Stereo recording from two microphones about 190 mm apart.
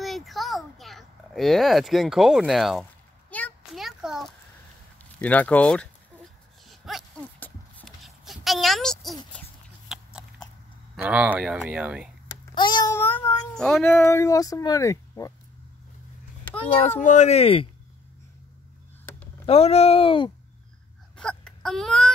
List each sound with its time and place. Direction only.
0.0 s a sound: centre (ahead or behind)
5.2 s speech: 10° left (ahead or behind)
6.7 s horse: centre (ahead or behind)
9.9 s biting: centre (ahead or behind)
11.0 s speech: 5° right (ahead or behind)
12.5 s child singing: 25° left (ahead or behind)
13.6 s speech: 5° left (ahead or behind)
13.9 s speech: 15° left (ahead or behind)
17.0 s speech: 40° left (ahead or behind)
19.4 s speech: 30° left (ahead or behind)
21.2 s wail: 5° left (ahead or behind)